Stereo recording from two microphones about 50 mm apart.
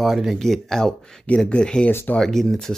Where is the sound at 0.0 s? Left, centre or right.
Centre.